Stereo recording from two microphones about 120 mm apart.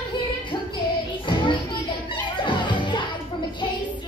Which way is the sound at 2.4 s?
40° left (ahead or behind).